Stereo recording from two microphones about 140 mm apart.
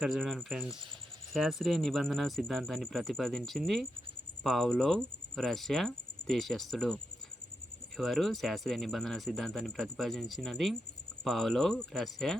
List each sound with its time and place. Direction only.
0.0 s speech: centre (ahead or behind)